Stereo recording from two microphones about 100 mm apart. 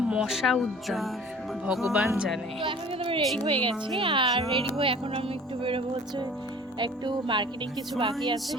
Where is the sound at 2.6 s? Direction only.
60° right (ahead or behind).